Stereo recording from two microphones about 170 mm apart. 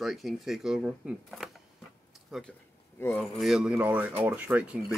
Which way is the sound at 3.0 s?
10° left (ahead or behind).